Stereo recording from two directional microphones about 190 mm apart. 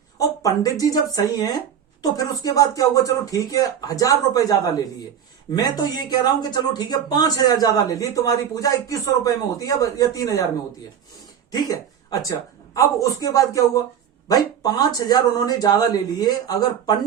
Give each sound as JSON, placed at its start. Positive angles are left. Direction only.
{"t": 0.2, "sound": "speech", "side_deg": 15}
{"t": 12.1, "sound": "speech", "side_deg": 20}